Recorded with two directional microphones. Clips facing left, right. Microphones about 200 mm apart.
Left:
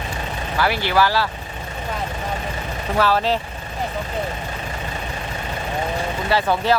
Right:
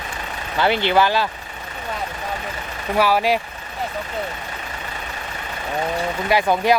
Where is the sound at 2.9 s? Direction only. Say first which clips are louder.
Right 1 dB; 10° right (ahead or behind).